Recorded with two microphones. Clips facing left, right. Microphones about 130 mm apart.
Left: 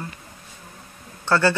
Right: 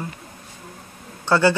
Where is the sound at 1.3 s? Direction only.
15° right (ahead or behind).